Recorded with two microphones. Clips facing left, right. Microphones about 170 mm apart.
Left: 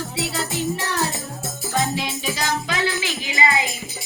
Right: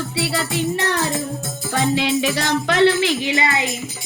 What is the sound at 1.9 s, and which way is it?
Music, 75° right (ahead or behind).